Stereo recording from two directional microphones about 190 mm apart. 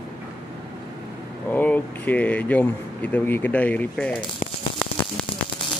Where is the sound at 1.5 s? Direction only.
10° left (ahead or behind).